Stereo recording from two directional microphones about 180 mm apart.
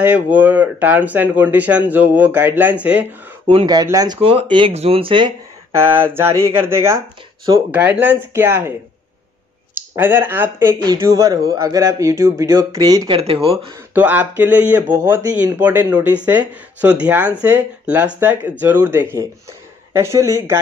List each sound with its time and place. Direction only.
0.0 s speech: 10° right (ahead or behind)
3.4 s speech: 25° right (ahead or behind)
5.7 s speech: 15° right (ahead or behind)
9.8 s speech: 10° right (ahead or behind)
13.2 s speech: 30° right (ahead or behind)
13.9 s speech: 10° right (ahead or behind)